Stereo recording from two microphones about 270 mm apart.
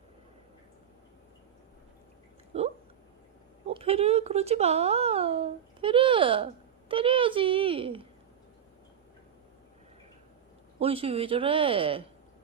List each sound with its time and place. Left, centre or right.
2.5 s a sound: right
3.7 s speech: right
10.8 s speech: centre